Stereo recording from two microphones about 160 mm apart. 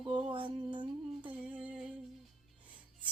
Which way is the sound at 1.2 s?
10° right (ahead or behind).